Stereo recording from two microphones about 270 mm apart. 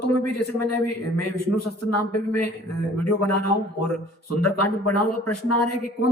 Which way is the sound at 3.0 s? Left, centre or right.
Left.